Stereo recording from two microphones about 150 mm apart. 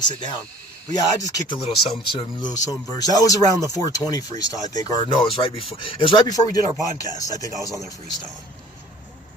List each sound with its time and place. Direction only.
0.1 s speech: 30° left (ahead or behind)